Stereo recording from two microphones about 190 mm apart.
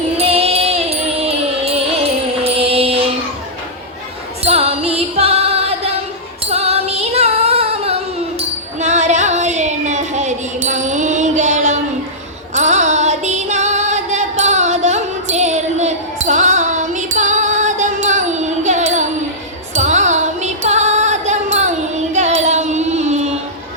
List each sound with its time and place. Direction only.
0.2 s music: 30° right (ahead or behind)
4.4 s music: 35° right (ahead or behind)
8.8 s child singing: 40° right (ahead or behind)
12.5 s music: 40° right (ahead or behind)